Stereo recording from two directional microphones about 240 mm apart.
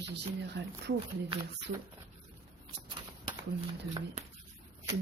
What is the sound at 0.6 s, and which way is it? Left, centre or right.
Speech, right.